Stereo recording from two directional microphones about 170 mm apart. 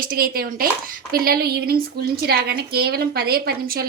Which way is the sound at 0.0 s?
60° right (ahead or behind).